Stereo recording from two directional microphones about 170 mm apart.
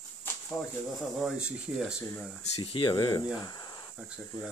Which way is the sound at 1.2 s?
5° right (ahead or behind).